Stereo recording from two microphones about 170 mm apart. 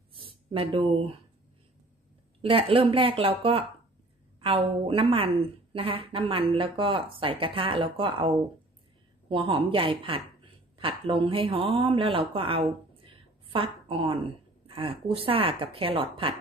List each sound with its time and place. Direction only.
0.1 s speech: 30° right (ahead or behind)
2.4 s a woman's voice: 35° right (ahead or behind)
9.3 s a woman's voice: 30° right (ahead or behind)